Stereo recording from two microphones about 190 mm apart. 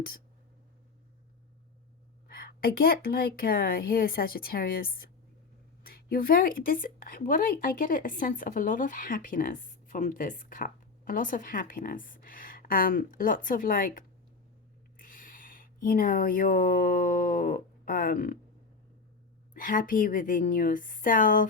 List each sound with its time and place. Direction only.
2.5 s speech: 50° left (ahead or behind)
19.5 s speech: 45° left (ahead or behind)